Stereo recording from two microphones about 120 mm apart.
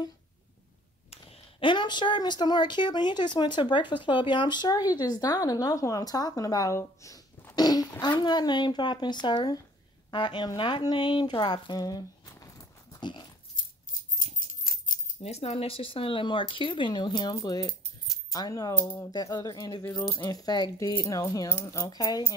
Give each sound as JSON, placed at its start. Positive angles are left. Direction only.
{"t": 1.1, "sound": "speech", "side_deg": 50}
{"t": 14.1, "sound": "speech", "side_deg": 90}